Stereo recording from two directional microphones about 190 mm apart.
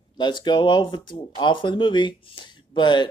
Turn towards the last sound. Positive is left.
turn(degrees=25)  # may be behind; listen again after turning